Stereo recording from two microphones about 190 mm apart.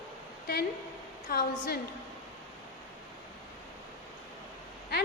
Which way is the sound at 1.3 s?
55° left (ahead or behind).